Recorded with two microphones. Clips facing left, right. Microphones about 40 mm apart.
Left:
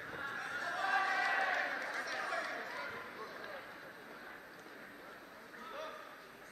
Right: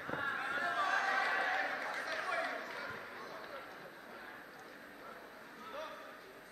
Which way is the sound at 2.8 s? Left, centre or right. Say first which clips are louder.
Left 1 dB; centre.